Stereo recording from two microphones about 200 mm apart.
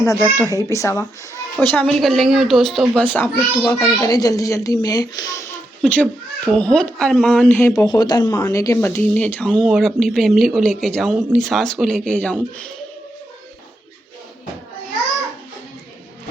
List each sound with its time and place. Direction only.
0.5 s a woman's voice: 15° left (ahead or behind)
4.0 s a woman's voice: 20° left (ahead or behind)
5.8 s speech: 5° left (ahead or behind)
7.9 s speech: 20° left (ahead or behind)